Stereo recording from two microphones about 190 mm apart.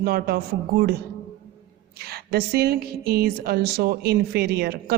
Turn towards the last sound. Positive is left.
turn(degrees=-60)  # may be behind; listen again after turning